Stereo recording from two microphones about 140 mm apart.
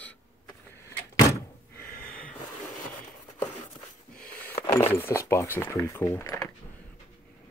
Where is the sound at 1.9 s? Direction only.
80° left.